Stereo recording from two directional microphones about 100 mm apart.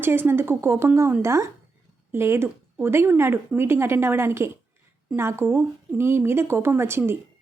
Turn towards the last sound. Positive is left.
turn(degrees=-25)  # may be behind; listen again after turning